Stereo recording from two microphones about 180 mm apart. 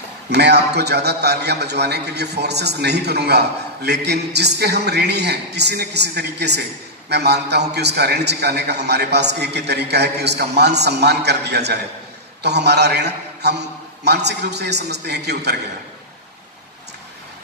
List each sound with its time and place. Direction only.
0.3 s a man's voice: 65° right (ahead or behind)